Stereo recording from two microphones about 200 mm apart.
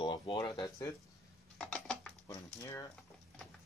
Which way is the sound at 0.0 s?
25° left (ahead or behind).